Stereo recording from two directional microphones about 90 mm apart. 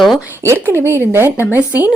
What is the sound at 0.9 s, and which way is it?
Speech, 25° right (ahead or behind).